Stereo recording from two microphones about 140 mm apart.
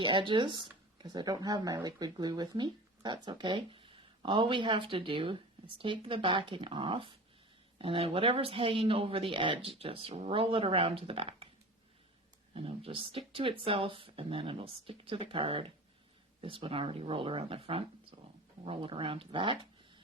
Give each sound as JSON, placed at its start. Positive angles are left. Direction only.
{"t": 0.0, "sound": "speech", "side_deg": -35}
{"t": 12.5, "sound": "speech", "side_deg": -40}